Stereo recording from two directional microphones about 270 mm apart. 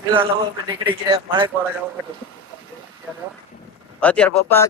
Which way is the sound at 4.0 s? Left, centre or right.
Centre.